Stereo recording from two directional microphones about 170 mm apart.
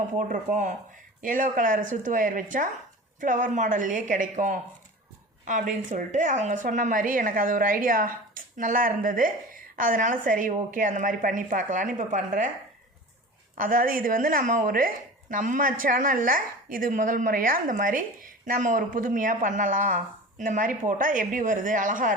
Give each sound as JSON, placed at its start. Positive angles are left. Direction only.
{"t": 0.2, "sound": "a woman's voice", "side_deg": -50}
{"t": 13.6, "sound": "a woman's voice", "side_deg": -55}